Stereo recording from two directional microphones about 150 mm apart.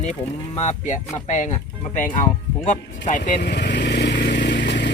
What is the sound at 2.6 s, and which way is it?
Speech, 55° left (ahead or behind).